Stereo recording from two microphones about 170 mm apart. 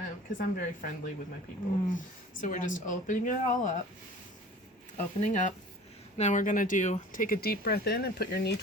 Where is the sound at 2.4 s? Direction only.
50° left (ahead or behind).